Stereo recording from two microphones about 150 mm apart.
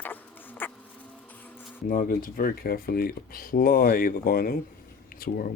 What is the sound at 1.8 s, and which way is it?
Speech, 70° left (ahead or behind).